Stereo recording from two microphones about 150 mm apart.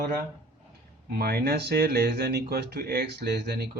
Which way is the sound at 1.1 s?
90° right.